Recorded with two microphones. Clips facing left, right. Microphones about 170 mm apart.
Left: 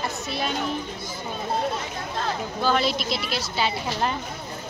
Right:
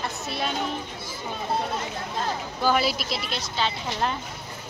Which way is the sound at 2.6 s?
5° right (ahead or behind).